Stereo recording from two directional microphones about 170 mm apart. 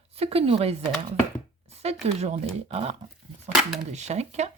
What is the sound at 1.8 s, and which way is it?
Speech, 40° right (ahead or behind).